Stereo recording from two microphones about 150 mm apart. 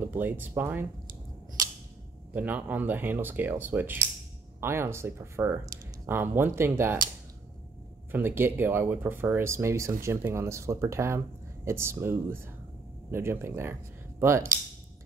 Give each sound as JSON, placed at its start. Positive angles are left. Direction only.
{"t": 0.0, "sound": "speech", "side_deg": -15}
{"t": 2.3, "sound": "speech", "side_deg": -10}
{"t": 8.1, "sound": "speech", "side_deg": -15}